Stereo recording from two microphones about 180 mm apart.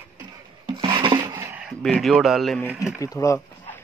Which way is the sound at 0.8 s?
25° right (ahead or behind).